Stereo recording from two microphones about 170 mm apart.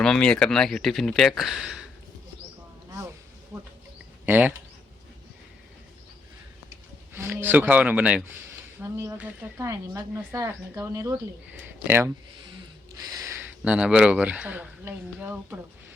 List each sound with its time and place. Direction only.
0.0 s speech: 5° left (ahead or behind)
4.3 s speech: 10° right (ahead or behind)
7.1 s speech: 15° right (ahead or behind)
8.8 s speech: 15° right (ahead or behind)
13.1 s a sound: 20° right (ahead or behind)
13.4 s speech: 5° right (ahead or behind)